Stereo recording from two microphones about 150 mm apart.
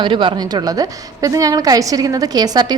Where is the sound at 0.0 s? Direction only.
30° right (ahead or behind).